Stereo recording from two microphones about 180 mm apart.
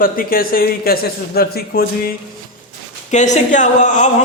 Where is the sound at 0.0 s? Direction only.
55° left (ahead or behind).